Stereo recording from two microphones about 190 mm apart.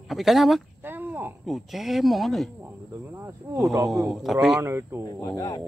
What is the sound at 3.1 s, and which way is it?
Speech, 15° right (ahead or behind).